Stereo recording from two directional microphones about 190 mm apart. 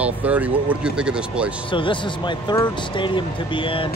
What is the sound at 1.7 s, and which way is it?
Speech, 25° left (ahead or behind).